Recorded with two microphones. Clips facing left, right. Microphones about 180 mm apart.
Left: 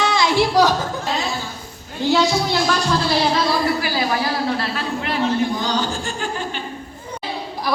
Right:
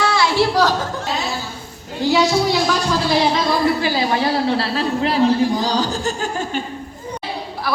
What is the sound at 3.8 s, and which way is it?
A woman's voice, 25° right (ahead or behind).